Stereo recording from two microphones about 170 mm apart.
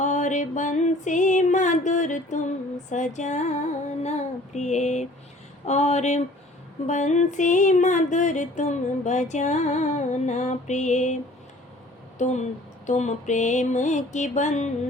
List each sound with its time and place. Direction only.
0.0 s music: 45° left (ahead or behind)
4.0 s female singing: 40° left (ahead or behind)
6.8 s music: 45° left (ahead or behind)
12.2 s music: 45° left (ahead or behind)